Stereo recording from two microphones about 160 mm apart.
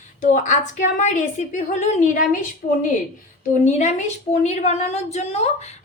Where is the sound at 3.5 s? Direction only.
50° left (ahead or behind).